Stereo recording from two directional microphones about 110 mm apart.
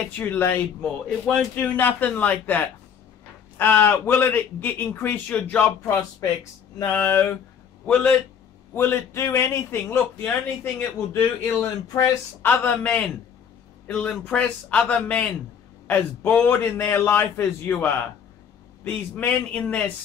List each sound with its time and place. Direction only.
0.0 s a man's voice: 15° left (ahead or behind)
8.7 s a man's voice: 25° left (ahead or behind)
12.4 s a man's voice: 15° left (ahead or behind)
18.9 s a man's voice: 15° left (ahead or behind)